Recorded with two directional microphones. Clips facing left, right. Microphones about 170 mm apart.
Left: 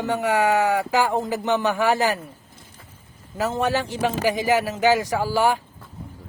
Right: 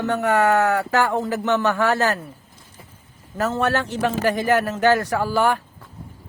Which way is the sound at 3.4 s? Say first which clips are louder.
Right 1 dB; 15° left (ahead or behind).